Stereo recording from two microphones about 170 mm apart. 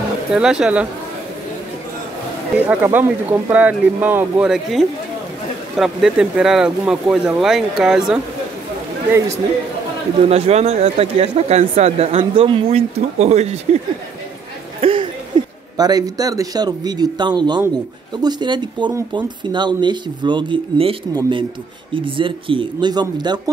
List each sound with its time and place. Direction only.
0.3 s speech: 5° right (ahead or behind)
2.5 s speech: 10° right (ahead or behind)
10.3 s speech: 40° right (ahead or behind)
14.8 s a sound: 30° right (ahead or behind)
15.3 s a man's voice: 25° right (ahead or behind)